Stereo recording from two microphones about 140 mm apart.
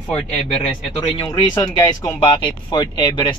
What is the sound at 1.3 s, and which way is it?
Speech, 25° left (ahead or behind).